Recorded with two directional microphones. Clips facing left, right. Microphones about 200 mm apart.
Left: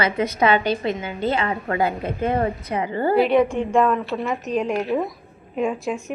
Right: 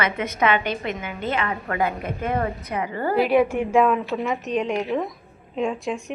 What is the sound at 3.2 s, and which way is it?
A woman's voice, 5° right (ahead or behind).